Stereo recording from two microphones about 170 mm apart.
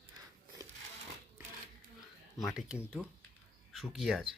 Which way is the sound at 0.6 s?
20° right (ahead or behind).